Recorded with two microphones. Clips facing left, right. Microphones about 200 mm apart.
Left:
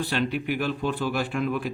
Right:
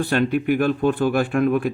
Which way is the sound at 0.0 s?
50° right (ahead or behind).